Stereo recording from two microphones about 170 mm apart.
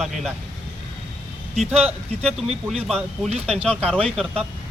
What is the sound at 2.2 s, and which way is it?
Speech, 5° left (ahead or behind).